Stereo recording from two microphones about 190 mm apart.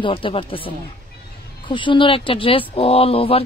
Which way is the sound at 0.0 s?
30° left (ahead or behind).